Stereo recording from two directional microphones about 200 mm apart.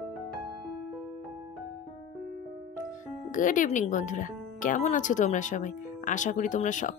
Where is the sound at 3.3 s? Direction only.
40° left (ahead or behind).